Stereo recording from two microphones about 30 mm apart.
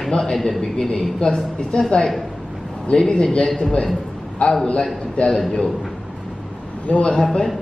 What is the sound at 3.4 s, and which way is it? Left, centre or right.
Speech, centre.